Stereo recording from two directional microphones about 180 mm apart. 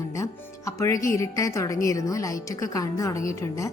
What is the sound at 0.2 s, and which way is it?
A woman's voice, 15° left (ahead or behind).